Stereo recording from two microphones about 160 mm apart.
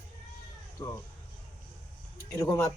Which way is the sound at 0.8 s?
20° left (ahead or behind).